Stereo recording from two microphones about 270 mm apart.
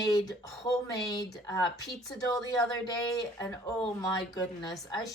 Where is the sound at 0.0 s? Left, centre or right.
Centre.